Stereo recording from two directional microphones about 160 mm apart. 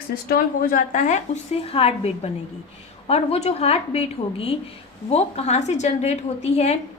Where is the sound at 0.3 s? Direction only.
60° left (ahead or behind).